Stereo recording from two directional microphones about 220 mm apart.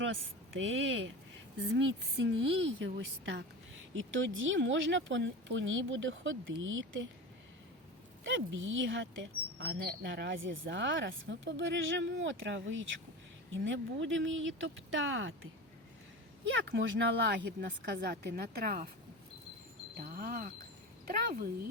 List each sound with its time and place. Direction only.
0.0 s a woman's voice: 60° right (ahead or behind)
8.3 s a woman's voice: 60° right (ahead or behind)
16.5 s a woman's voice: 55° right (ahead or behind); by 18.9 s 40° right (ahead or behind)
20.0 s speech: 40° right (ahead or behind)